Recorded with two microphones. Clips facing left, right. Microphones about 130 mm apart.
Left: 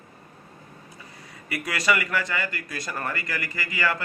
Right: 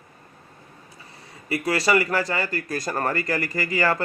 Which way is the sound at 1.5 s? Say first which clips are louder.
Right 4 dB; 30° right (ahead or behind).